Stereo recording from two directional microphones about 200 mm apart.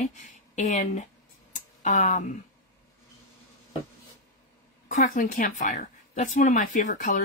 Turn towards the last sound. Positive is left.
turn(degrees=40)  # may be behind; listen again after turning